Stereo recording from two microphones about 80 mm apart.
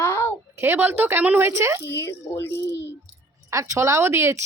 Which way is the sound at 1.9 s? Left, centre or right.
Left.